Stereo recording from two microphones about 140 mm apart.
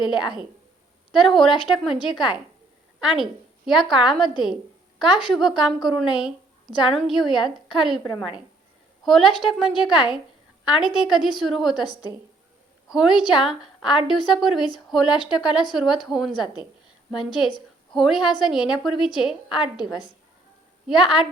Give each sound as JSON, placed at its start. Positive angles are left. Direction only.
{"t": 0.0, "sound": "a woman's voice", "side_deg": -5}
{"t": 9.0, "sound": "a woman's voice", "side_deg": 0}
{"t": 12.9, "sound": "a woman's voice", "side_deg": -5}
{"t": 16.3, "sound": "a woman's voice", "side_deg": 30}
{"t": 17.1, "sound": "a woman's voice", "side_deg": 0}